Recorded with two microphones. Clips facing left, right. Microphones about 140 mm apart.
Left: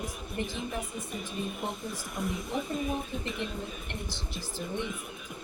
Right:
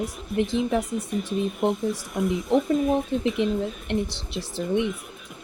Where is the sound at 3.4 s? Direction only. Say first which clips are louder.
Right 14 dB; 90° right.